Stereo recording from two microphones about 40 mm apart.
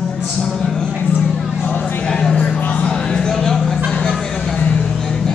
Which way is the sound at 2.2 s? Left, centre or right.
Left.